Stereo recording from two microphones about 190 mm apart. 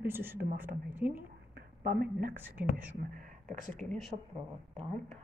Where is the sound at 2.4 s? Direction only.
10° right (ahead or behind).